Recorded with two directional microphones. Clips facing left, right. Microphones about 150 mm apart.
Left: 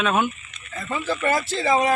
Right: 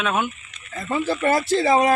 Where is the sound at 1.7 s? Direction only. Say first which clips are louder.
Right 1 dB; 45° right (ahead or behind).